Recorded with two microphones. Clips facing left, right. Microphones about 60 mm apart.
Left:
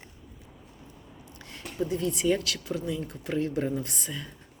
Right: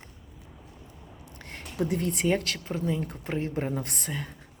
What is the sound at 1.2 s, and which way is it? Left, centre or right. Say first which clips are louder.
Speech: even; right.